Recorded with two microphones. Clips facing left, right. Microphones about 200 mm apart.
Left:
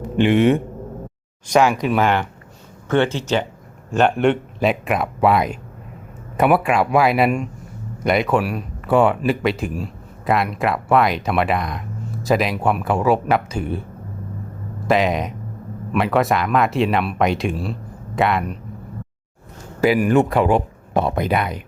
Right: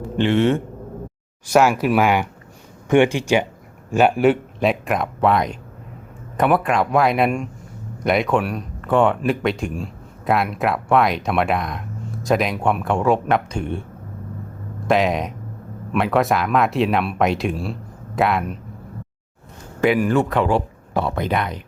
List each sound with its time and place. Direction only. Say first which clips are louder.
0.2 s speech: left 2 dB; 15° left (ahead or behind)
1.5 s speech: even; 5° right (ahead or behind)
14.8 s speech: even; centre (ahead or behind)
19.8 s speech: left 1 dB; 5° left (ahead or behind)
20.1 s speech: left 3 dB; 15° left (ahead or behind)